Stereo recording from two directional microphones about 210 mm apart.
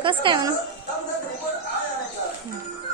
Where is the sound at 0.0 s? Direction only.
25° right (ahead or behind).